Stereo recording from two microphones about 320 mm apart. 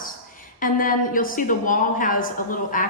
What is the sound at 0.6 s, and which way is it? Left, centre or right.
A woman's voice, left.